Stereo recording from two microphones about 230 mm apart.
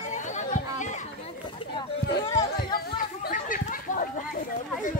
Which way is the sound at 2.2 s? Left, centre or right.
Centre.